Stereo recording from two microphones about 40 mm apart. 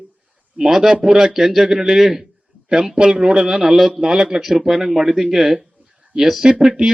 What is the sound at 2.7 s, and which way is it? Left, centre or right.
A man's voice, centre.